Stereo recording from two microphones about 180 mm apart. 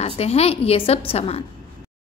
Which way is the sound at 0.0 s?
35° left (ahead or behind).